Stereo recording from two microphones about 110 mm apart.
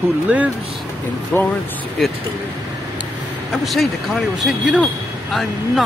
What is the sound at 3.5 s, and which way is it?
Speech, centre (ahead or behind).